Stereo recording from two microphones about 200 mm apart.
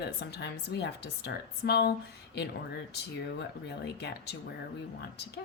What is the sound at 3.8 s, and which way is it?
Speech, 55° left (ahead or behind).